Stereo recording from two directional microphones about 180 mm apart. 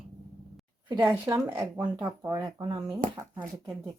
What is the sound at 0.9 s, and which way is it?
Speech, 20° right (ahead or behind).